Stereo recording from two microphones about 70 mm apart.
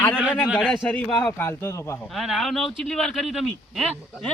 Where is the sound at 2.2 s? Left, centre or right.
Centre.